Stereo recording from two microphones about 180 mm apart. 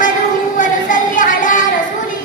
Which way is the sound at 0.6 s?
45° left (ahead or behind).